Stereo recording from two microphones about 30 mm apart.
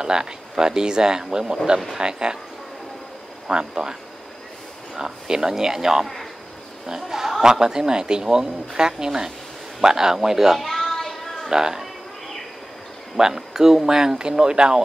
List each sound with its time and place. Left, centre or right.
0.0 s speech: right
3.4 s speech: right
4.9 s speech: right
7.1 s a man's voice: centre
10.6 s a sound: centre
11.5 s speech: centre
13.2 s speech: centre